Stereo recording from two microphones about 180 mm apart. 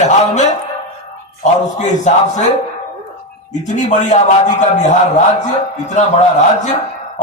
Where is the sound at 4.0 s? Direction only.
40° left (ahead or behind).